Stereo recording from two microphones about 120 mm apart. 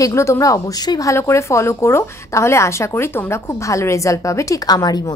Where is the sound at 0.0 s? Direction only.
25° left (ahead or behind).